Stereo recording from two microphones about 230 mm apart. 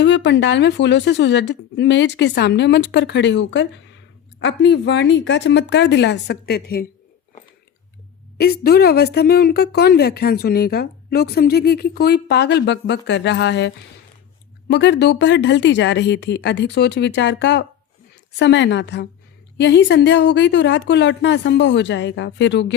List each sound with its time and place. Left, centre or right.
0.0 s a woman's voice: left
8.4 s a woman's voice: left